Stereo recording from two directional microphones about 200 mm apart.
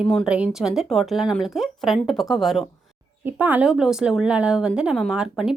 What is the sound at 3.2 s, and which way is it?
Speech, 10° right (ahead or behind).